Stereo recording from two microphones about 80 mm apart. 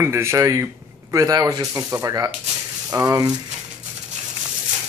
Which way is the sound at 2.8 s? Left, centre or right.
Right.